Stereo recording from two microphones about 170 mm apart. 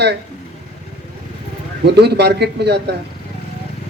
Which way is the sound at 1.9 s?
80° right.